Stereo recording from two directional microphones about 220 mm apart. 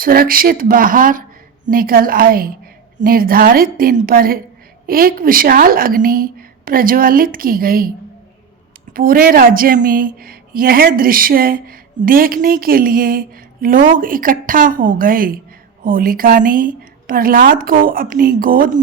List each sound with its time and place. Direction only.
0.0 s a woman's voice: 40° right (ahead or behind)
8.9 s a woman's voice: 40° right (ahead or behind)